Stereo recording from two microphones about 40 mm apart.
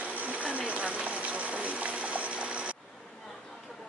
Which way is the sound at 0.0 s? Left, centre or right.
Right.